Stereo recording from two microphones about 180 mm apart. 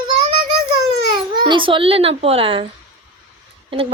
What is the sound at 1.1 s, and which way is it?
A child's voice, 25° right (ahead or behind).